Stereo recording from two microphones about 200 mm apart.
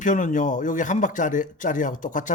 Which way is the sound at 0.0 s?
40° left (ahead or behind).